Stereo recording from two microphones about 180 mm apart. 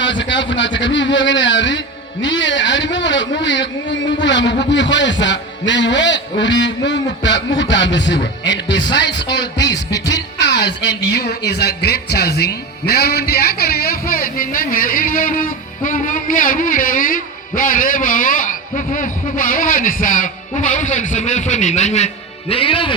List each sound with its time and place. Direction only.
0.0 s a man's voice: 90° left; by 23.0 s 30° left (ahead or behind)